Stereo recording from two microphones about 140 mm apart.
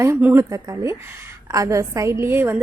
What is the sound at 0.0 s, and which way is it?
A woman's voice, 15° right (ahead or behind).